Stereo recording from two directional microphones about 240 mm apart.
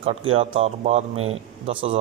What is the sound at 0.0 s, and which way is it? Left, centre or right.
Speech, right.